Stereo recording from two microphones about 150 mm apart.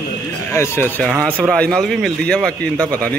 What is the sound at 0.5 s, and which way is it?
Speech, 15° left (ahead or behind).